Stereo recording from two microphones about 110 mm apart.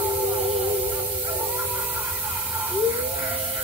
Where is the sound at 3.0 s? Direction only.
15° right (ahead or behind).